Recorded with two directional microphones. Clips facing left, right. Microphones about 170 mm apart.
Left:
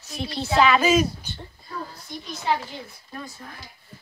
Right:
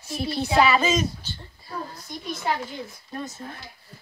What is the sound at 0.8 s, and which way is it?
Speech, 10° left (ahead or behind).